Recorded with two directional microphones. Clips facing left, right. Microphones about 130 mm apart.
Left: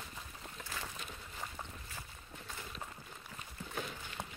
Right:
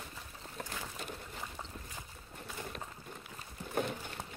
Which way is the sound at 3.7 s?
55° right (ahead or behind).